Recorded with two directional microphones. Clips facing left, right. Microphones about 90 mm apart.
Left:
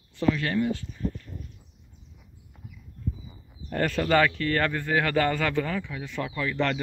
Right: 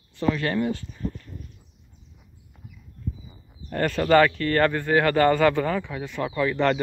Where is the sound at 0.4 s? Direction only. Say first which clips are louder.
Right 2 dB; 5° right (ahead or behind).